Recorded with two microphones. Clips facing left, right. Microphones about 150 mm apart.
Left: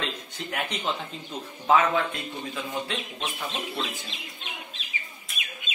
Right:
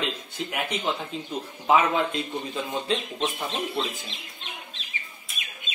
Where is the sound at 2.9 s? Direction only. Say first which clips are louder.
Right 6 dB; 20° right (ahead or behind).